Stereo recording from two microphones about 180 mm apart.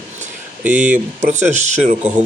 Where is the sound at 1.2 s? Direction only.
40° right (ahead or behind).